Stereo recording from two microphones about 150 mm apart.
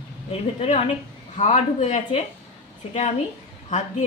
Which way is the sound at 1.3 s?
50° left (ahead or behind).